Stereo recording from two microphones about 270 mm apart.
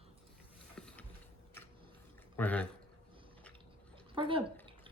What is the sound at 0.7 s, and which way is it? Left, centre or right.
Mechanisms, centre.